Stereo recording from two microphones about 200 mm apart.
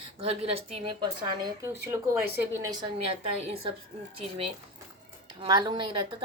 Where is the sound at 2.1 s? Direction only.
15° right (ahead or behind); by 3.5 s 30° right (ahead or behind).